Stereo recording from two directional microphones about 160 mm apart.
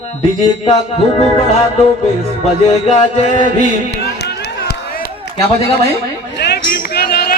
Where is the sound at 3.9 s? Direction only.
90° left; by 5.1 s 75° left (ahead or behind).